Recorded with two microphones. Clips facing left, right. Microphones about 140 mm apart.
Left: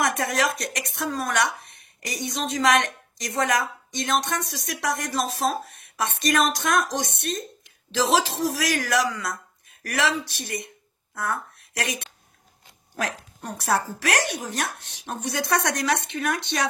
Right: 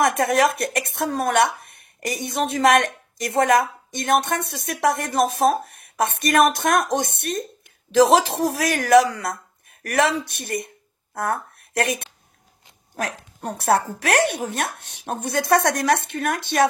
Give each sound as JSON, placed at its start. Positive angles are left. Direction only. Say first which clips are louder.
{"t": 0.0, "sound": "speech", "louder": "right 6 dB", "side_deg": -55}
{"t": 13.4, "sound": "a woman's voice", "louder": "right 5 dB", "side_deg": -60}